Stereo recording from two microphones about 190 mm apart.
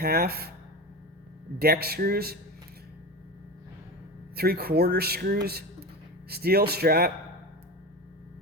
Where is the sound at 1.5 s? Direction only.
55° right (ahead or behind).